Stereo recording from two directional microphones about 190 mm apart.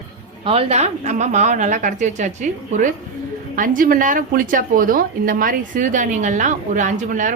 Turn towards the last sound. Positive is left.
turn(degrees=-40)  # may be behind; listen again after turning